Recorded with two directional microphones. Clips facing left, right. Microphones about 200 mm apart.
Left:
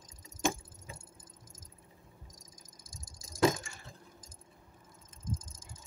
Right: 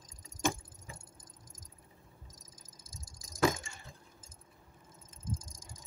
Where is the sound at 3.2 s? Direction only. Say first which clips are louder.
Left 2 dB; 25° left (ahead or behind).